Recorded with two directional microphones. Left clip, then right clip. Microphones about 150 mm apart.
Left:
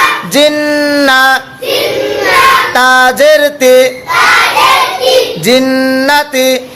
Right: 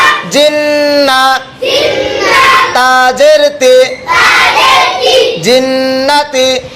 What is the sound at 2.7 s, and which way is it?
Music, 35° left (ahead or behind).